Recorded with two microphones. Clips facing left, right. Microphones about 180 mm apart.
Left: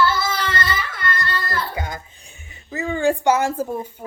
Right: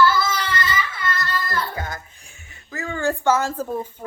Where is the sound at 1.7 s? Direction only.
15° left (ahead or behind).